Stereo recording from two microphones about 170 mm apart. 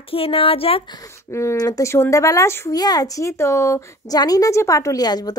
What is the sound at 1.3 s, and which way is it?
Speech, 15° left (ahead or behind).